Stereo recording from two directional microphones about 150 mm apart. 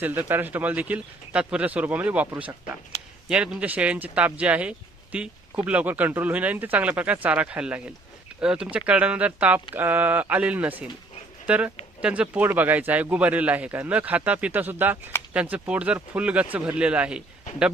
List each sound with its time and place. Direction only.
0.0 s speech: 15° right (ahead or behind)
3.2 s speech: 5° right (ahead or behind)